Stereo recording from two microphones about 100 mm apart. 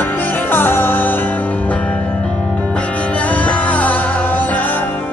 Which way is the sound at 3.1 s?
15° left (ahead or behind).